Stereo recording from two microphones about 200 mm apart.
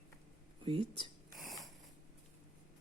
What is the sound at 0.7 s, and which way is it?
Speech, 25° right (ahead or behind).